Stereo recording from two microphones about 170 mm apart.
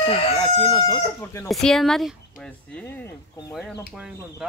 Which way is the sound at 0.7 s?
20° left (ahead or behind).